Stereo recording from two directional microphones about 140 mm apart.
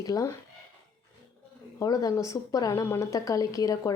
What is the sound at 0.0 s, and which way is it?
Speech, 25° left (ahead or behind).